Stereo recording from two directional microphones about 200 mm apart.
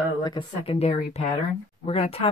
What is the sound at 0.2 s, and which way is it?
Speech, 25° left (ahead or behind).